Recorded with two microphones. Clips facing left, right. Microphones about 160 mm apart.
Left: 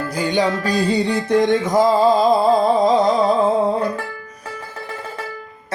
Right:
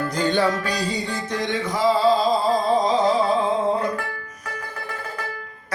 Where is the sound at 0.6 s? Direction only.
50° left (ahead or behind).